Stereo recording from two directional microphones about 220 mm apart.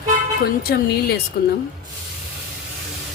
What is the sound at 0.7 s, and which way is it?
Speech, 45° left (ahead or behind).